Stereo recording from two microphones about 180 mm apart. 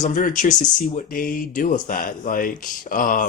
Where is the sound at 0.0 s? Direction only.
50° left (ahead or behind).